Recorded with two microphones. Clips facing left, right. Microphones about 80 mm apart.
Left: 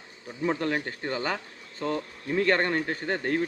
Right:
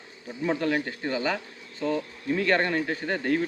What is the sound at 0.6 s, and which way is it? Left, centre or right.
Speech, left.